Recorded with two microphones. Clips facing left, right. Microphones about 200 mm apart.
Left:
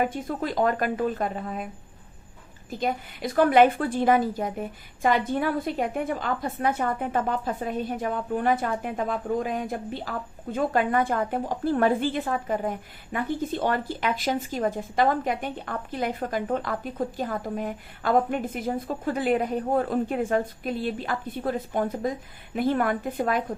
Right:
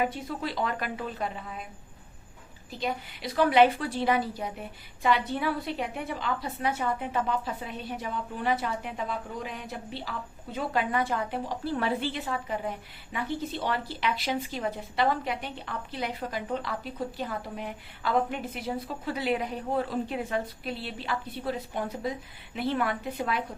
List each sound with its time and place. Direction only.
0.0 s a woman's voice: 50° left (ahead or behind)
2.6 s a woman's voice: 50° left (ahead or behind)